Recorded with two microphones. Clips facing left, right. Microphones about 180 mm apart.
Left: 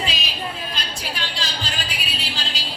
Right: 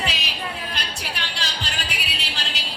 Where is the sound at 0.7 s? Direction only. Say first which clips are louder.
Left 1 dB; 70° right (ahead or behind).